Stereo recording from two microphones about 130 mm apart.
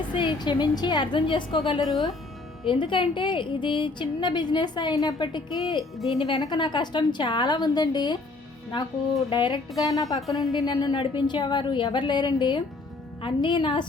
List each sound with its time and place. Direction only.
0.2 s a woman's voice: 35° left (ahead or behind)
9.3 s a woman's voice: 40° left (ahead or behind)
10.2 s speech: centre (ahead or behind)
10.6 s a woman's voice: 30° left (ahead or behind)